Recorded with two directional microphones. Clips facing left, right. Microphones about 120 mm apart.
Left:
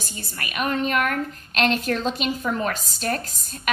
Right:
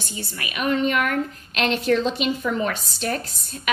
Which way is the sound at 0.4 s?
45° left (ahead or behind).